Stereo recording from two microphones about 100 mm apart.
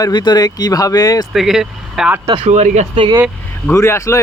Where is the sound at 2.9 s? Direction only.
60° right (ahead or behind).